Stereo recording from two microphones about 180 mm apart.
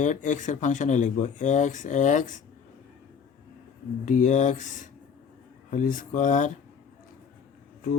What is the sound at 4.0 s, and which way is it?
Speech, 45° left (ahead or behind).